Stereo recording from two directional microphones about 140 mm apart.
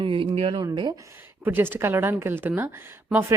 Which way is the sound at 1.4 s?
15° right (ahead or behind).